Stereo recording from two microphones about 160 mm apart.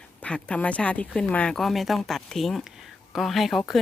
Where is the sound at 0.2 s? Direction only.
5° left (ahead or behind).